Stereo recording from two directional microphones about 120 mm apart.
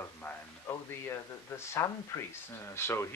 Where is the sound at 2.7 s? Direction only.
20° left (ahead or behind).